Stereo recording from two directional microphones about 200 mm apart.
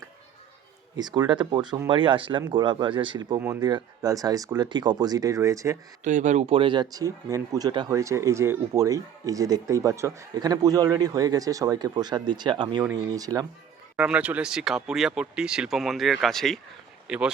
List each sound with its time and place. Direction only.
0.9 s speech: 20° right (ahead or behind)
6.1 s speech: 35° right (ahead or behind); by 13.5 s 20° right (ahead or behind)
13.9 s speech: 5° right (ahead or behind)